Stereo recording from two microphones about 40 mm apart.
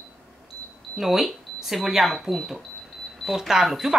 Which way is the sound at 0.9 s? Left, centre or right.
Centre.